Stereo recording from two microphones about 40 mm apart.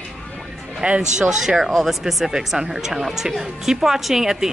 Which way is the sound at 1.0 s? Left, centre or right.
Centre.